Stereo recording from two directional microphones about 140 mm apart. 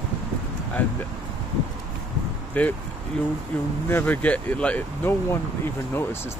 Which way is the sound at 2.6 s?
10° left (ahead or behind).